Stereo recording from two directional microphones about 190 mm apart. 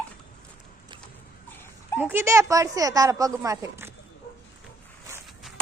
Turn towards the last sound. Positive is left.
turn(degrees=0)  # may be behind; listen again after turning